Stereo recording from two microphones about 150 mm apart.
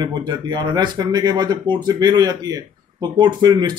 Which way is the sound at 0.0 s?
30° right (ahead or behind).